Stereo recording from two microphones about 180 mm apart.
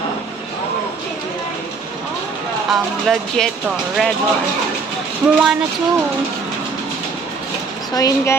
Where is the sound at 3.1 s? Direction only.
Centre (ahead or behind).